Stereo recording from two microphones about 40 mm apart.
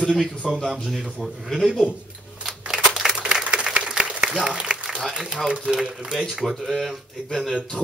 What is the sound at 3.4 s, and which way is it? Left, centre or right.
Applause, right.